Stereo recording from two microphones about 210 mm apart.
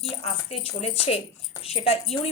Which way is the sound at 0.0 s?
30° left (ahead or behind).